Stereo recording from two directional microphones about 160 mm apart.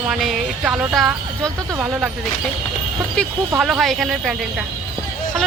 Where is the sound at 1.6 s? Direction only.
20° right (ahead or behind).